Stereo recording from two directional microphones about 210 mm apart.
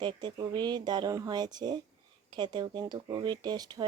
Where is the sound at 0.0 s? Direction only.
20° right (ahead or behind).